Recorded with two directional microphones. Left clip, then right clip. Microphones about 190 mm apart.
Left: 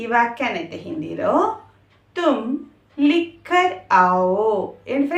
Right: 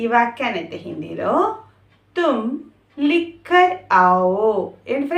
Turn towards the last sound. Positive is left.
turn(degrees=-15)  # may be behind; listen again after turning